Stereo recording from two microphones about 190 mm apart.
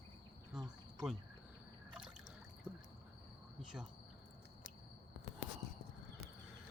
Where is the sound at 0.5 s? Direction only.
Centre (ahead or behind).